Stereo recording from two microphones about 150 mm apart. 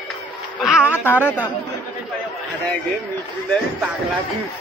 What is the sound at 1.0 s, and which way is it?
Speech, 15° left (ahead or behind).